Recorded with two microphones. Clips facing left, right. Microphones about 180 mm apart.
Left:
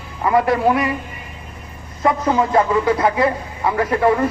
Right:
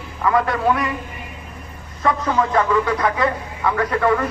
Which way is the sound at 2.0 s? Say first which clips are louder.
Left 2 dB; 20° left (ahead or behind).